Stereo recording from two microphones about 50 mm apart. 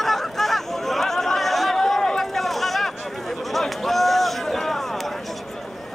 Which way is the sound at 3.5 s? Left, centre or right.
Centre.